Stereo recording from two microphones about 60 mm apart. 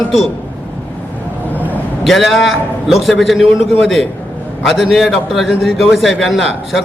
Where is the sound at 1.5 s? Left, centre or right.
Left.